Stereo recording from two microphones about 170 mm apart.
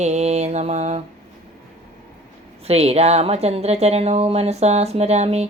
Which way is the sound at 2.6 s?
40° right (ahead or behind).